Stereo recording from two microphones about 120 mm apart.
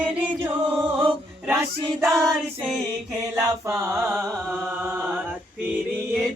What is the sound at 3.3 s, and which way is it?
Mantra, 25° right (ahead or behind).